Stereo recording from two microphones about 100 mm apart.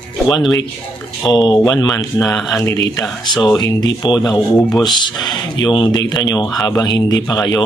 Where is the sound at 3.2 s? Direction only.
45° left (ahead or behind).